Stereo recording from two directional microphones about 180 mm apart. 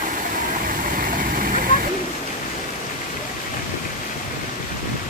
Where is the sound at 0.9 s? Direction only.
50° right (ahead or behind).